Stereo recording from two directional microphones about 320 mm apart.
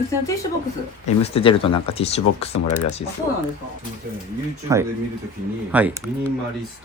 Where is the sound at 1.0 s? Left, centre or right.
Centre.